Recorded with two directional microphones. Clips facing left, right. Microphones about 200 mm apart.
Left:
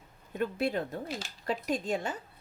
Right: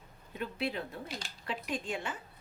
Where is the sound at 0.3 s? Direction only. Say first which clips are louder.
Left 6 dB; 45° left (ahead or behind).